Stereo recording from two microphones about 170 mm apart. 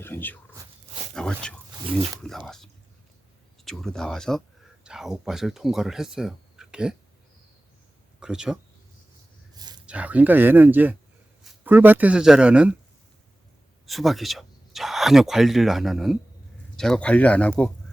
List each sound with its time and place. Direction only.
0.0 s speech: 10° left (ahead or behind)
1.8 s speech: 30° right (ahead or behind)
2.3 s speech: 5° left (ahead or behind)
3.6 s speech: centre (ahead or behind)
8.2 s speech: 5° right (ahead or behind)
9.6 s a sound: 25° right (ahead or behind)
9.8 s speech: 10° right (ahead or behind)
13.8 s speech: centre (ahead or behind)